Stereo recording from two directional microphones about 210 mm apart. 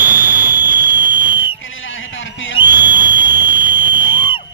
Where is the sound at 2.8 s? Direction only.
10° right (ahead or behind).